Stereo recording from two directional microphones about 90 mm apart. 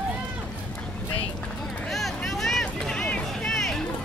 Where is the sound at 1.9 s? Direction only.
Centre (ahead or behind).